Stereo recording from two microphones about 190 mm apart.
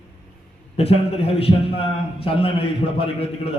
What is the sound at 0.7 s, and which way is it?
A man's voice, 30° left (ahead or behind).